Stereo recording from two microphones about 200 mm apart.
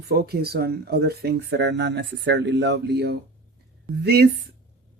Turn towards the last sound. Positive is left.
turn(degrees=-55)  # may be behind; listen again after turning